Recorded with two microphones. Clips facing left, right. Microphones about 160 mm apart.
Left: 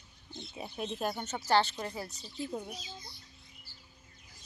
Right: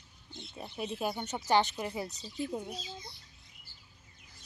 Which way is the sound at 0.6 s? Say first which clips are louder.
Left 1 dB; 5° left (ahead or behind).